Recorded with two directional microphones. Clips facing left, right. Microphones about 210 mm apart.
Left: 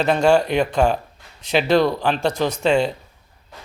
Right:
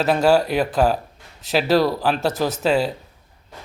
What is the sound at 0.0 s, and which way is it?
A man's voice, 5° right (ahead or behind).